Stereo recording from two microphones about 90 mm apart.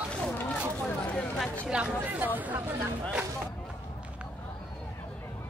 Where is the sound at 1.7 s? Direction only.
10° right (ahead or behind).